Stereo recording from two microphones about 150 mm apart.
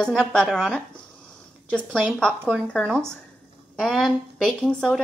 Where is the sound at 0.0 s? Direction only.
5° left (ahead or behind).